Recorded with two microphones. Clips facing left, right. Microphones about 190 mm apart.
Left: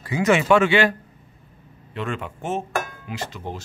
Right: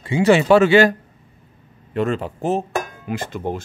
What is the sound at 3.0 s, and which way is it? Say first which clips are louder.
Speech: right 6 dB; 50° right (ahead or behind).